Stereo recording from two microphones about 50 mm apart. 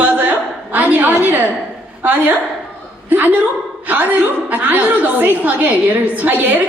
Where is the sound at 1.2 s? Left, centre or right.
Right.